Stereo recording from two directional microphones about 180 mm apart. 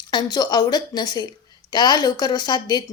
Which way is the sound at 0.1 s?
25° left (ahead or behind).